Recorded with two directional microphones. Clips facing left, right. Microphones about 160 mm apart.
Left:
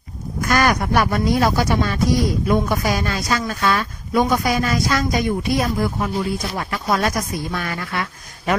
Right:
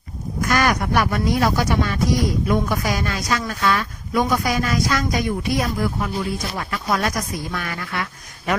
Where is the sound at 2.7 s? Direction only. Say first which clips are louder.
Left 2 dB; 30° left (ahead or behind).